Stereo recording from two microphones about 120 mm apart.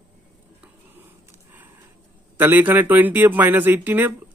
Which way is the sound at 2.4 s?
15° right (ahead or behind).